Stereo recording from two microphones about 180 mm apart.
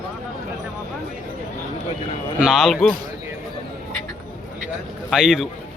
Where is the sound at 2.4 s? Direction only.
Centre (ahead or behind).